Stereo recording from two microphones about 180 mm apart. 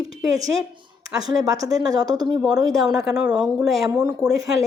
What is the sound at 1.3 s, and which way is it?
Speech, 20° right (ahead or behind).